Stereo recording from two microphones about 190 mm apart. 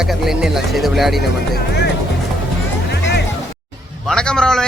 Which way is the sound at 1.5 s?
55° left (ahead or behind).